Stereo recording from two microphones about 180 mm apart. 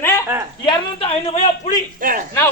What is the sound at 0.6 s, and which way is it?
Speech, 30° left (ahead or behind).